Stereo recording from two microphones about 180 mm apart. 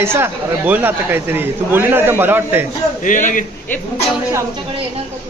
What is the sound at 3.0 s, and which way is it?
Speech, 45° left (ahead or behind).